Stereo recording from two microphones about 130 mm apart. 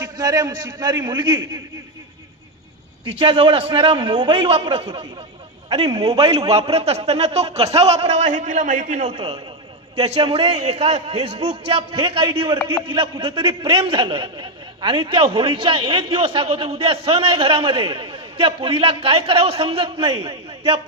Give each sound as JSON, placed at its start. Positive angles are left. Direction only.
{"t": 0.0, "sound": "a man's voice", "side_deg": -25}
{"t": 3.0, "sound": "a man's voice", "side_deg": -40}
{"t": 5.8, "sound": "a man's voice", "side_deg": -30}
{"t": 6.1, "sound": "a man's voice", "side_deg": -50}